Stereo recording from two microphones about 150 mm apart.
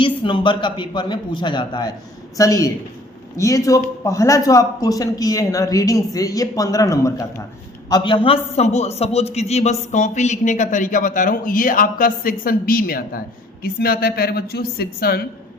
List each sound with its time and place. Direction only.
0.0 s a man's voice: 35° left (ahead or behind); by 15.3 s 90° left